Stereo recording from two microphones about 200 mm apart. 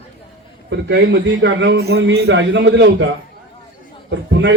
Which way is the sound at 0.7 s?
65° right (ahead or behind).